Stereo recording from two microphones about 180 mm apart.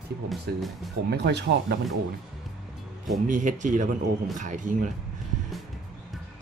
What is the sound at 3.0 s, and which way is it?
Speech, 45° right (ahead or behind).